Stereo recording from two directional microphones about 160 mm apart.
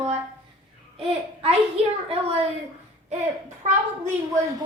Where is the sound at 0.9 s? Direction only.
40° right (ahead or behind).